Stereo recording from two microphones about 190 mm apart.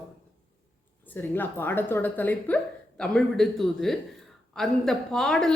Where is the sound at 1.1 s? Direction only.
10° left (ahead or behind).